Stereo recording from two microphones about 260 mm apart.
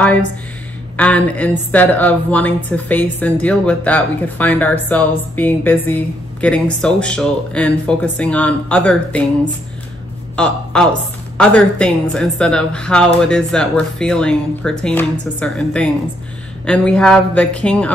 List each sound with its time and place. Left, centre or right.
0.9 s a woman's voice: centre
10.3 s a woman's voice: centre